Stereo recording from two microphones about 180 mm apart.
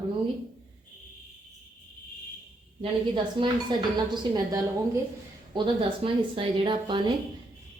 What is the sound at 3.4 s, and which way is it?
A woman's voice, 25° right (ahead or behind).